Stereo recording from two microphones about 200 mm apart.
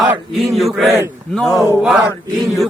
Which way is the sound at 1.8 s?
Centre (ahead or behind).